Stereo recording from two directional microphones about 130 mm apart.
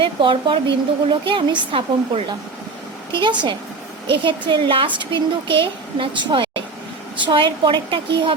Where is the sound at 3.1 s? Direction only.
35° right (ahead or behind).